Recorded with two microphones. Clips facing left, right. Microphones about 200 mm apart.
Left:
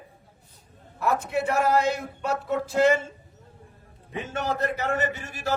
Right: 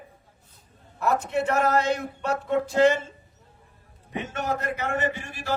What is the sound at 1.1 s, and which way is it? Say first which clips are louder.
Speech: right 1 dB; 5° left (ahead or behind).